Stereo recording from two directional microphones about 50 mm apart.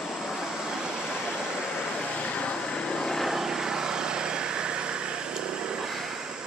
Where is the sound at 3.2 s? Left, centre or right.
Centre.